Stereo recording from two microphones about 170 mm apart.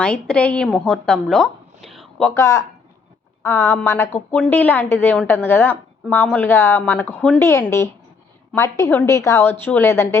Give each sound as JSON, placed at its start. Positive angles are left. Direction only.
{"t": 0.0, "sound": "a woman's voice", "side_deg": 5}
{"t": 2.3, "sound": "a woman's voice", "side_deg": 15}